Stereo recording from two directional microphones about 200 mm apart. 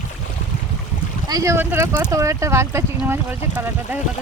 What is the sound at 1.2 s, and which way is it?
Speech, 15° right (ahead or behind).